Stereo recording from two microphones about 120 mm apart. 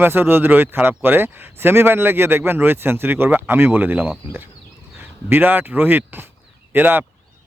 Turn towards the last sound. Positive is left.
turn(degrees=-15)  # may be behind; listen again after turning